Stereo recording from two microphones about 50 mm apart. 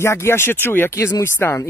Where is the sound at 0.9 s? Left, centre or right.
Left.